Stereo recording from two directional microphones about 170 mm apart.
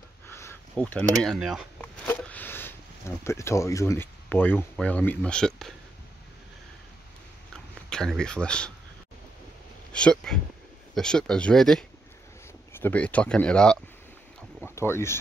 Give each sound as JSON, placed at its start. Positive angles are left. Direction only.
{"t": 0.3, "sound": "a sound", "side_deg": 15}
{"t": 1.2, "sound": "speech", "side_deg": 0}
{"t": 2.0, "sound": "a sound", "side_deg": 10}
{"t": 3.3, "sound": "speech", "side_deg": 15}
{"t": 7.9, "sound": "speech", "side_deg": 5}
{"t": 9.9, "sound": "speech", "side_deg": 5}
{"t": 14.6, "sound": "boat", "side_deg": 15}